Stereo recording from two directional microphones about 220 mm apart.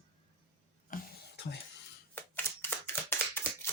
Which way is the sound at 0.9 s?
50° left (ahead or behind).